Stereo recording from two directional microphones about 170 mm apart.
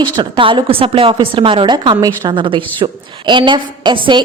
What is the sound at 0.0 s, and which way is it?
Speech, 30° right (ahead or behind).